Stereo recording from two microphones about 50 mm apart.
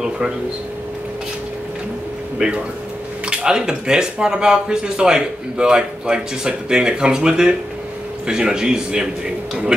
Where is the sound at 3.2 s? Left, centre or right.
Centre.